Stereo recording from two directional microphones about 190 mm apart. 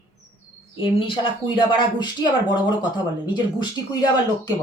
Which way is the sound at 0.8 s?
25° left (ahead or behind).